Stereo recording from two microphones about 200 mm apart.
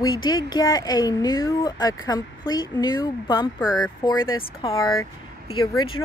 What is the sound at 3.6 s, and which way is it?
Speech, 5° right (ahead or behind).